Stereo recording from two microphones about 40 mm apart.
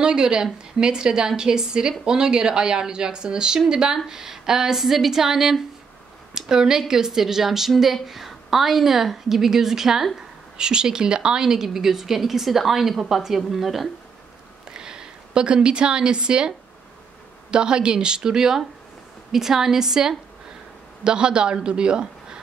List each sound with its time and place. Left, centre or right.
0.0 s a woman's voice: right; by 13.8 s centre
14.7 s a woman's voice: centre